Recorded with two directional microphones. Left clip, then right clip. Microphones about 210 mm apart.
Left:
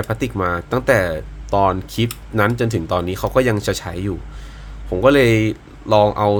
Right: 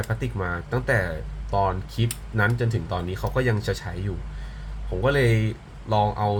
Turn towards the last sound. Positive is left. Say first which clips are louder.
# left 9 dB
turn(degrees=60)  # may be behind; listen again after turning